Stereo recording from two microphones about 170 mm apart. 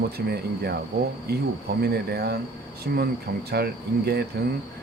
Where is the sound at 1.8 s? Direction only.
65° right (ahead or behind).